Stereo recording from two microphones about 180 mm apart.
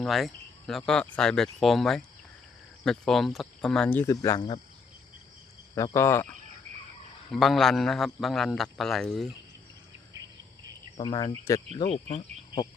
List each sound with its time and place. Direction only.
0.0 s a man's voice: centre (ahead or behind); by 4.6 s 25° left (ahead or behind)
5.7 s speech: 15° left (ahead or behind)
7.3 s a man's voice: centre (ahead or behind)
10.9 s speech: 25° left (ahead or behind)
11.9 s speech: 35° left (ahead or behind)